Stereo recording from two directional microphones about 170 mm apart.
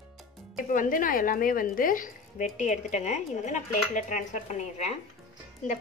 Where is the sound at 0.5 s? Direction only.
50° left (ahead or behind).